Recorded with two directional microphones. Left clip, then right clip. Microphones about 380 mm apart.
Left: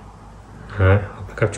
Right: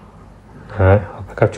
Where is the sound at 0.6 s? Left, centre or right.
Centre.